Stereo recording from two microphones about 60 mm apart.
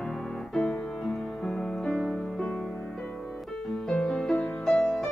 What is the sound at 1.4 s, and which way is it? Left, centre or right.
Music, centre.